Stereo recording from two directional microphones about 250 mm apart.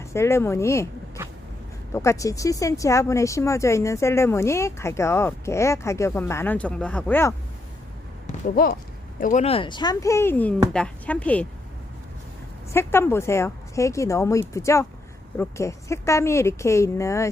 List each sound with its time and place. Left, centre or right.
0.0 s speech: centre
8.4 s speech: left; by 11.4 s centre
12.7 s speech: centre